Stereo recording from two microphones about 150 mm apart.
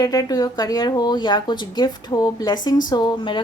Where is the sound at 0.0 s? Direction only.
25° left (ahead or behind).